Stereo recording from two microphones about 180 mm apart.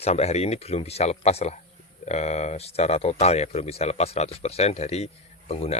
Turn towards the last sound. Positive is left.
turn(degrees=35)  # may be behind; listen again after turning